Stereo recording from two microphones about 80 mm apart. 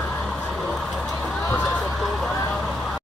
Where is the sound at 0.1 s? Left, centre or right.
Centre.